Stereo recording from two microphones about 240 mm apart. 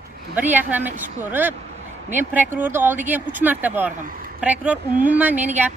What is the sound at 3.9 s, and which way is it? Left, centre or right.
Speech, right.